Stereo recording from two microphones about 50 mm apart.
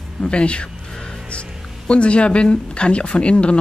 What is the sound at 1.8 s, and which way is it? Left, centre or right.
Speech, left.